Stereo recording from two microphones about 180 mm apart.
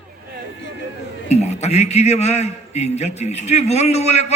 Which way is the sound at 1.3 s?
40° left (ahead or behind).